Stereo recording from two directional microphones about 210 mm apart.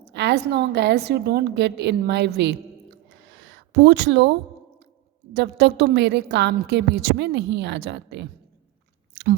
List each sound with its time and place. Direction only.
0.0 s a woman's voice: 55° right (ahead or behind)
3.2 s a sound: 55° right (ahead or behind)
5.3 s a woman's voice: 55° right (ahead or behind)